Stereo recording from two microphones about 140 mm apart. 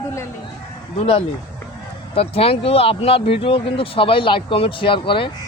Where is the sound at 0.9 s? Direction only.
40° left (ahead or behind).